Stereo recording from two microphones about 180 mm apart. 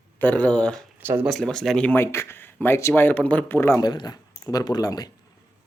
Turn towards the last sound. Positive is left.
turn(degrees=20)  # may be behind; listen again after turning